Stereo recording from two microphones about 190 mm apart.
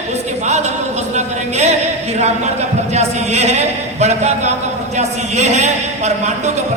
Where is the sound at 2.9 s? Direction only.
35° right (ahead or behind).